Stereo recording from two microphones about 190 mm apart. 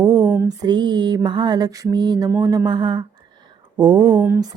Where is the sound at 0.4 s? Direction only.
20° right (ahead or behind).